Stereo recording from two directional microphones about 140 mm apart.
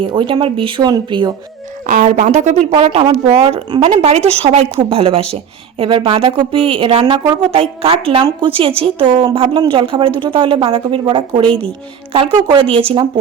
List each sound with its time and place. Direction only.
0.0 s speech: 35° right (ahead or behind)
1.9 s speech: 65° right (ahead or behind); by 4.0 s 30° right (ahead or behind)
4.3 s speech: 45° right (ahead or behind)
11.4 s speech: 10° left (ahead or behind)
12.1 s speech: 40° right (ahead or behind)